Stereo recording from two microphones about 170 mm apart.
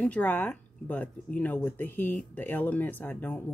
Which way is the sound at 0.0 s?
10° left (ahead or behind).